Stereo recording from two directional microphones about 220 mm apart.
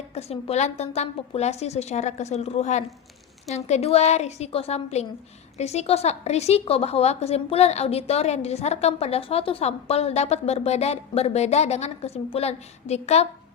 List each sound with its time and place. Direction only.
0.1 s a woman's voice: 30° left (ahead or behind)